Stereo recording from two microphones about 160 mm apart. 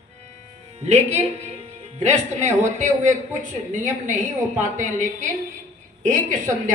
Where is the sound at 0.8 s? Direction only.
45° right (ahead or behind).